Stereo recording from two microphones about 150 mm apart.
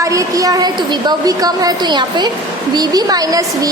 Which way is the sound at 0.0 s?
20° right (ahead or behind).